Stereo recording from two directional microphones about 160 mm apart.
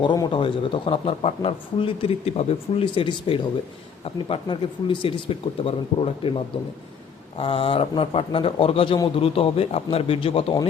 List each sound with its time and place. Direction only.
0.0 s speech: 30° left (ahead or behind)